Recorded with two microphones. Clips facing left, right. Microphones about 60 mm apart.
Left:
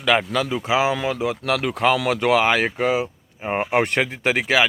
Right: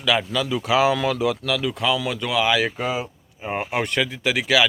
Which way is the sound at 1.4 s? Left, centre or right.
Left.